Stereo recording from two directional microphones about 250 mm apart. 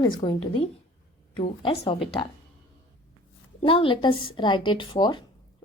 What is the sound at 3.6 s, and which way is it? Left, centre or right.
Speech, left.